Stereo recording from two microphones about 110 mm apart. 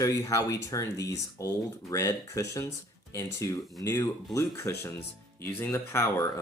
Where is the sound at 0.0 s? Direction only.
30° left (ahead or behind).